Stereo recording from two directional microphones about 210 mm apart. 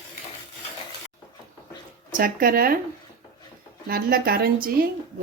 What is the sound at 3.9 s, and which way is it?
A woman's voice, 45° right (ahead or behind).